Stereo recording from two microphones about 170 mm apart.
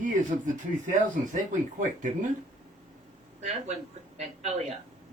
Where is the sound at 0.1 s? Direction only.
50° right (ahead or behind).